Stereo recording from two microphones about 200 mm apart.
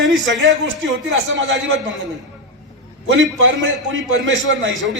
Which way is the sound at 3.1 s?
65° right (ahead or behind).